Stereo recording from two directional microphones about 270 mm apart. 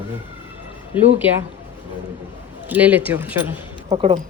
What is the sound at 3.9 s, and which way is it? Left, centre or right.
Speech, centre.